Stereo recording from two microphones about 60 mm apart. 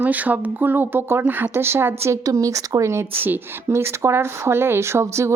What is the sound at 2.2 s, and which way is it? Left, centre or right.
Speech, right.